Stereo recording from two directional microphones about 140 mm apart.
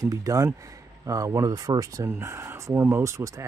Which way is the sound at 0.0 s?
25° right (ahead or behind).